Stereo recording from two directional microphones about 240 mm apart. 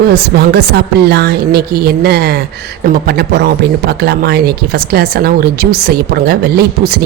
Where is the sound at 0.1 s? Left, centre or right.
Right.